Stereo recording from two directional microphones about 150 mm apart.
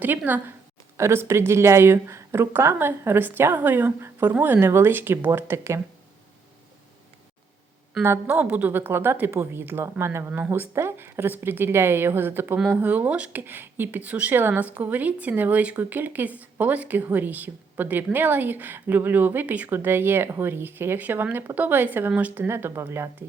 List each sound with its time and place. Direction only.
0.3 s a woman's voice: 10° right (ahead or behind)
8.0 s a woman's voice: 15° right (ahead or behind)